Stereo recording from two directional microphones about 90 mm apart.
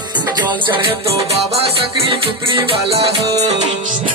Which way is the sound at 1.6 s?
80° right.